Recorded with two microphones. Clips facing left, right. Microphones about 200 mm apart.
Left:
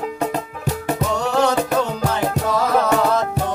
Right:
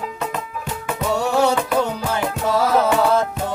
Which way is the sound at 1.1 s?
10° right (ahead or behind).